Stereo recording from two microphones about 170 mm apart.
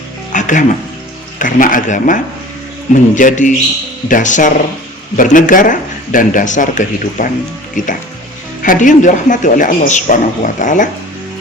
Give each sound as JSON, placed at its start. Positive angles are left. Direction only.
{"t": 0.3, "sound": "music", "side_deg": 50}
{"t": 1.4, "sound": "speech", "side_deg": 50}